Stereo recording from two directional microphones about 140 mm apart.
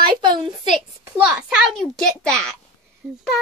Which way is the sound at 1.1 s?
5° right (ahead or behind).